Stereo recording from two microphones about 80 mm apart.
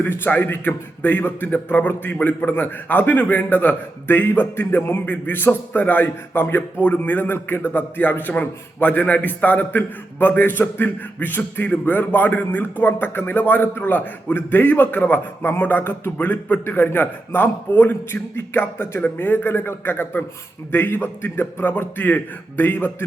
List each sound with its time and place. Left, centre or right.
0.0 s a man's voice: left